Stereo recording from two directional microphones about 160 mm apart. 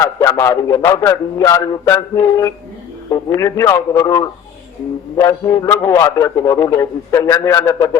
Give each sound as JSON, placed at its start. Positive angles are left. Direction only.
{"t": 0.0, "sound": "a man's voice", "side_deg": 20}